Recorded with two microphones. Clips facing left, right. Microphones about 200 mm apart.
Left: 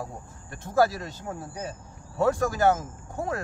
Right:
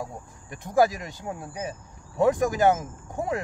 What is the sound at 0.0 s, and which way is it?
Speech, 15° right (ahead or behind).